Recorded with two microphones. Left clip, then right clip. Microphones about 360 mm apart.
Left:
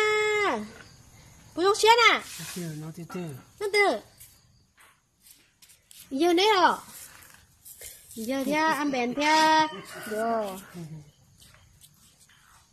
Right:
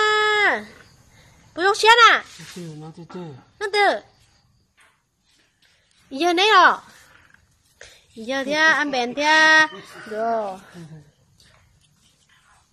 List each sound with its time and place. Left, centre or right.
0.0 s a sound: right
1.5 s a woman's voice: right
3.5 s speech: right
6.1 s speech: right
8.3 s speech: right